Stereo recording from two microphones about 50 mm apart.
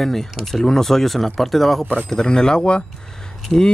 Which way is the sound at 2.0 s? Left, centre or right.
Centre.